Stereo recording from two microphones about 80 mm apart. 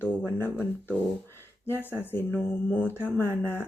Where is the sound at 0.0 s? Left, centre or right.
Left.